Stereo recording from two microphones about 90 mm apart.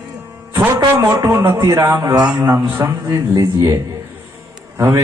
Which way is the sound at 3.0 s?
40° right (ahead or behind).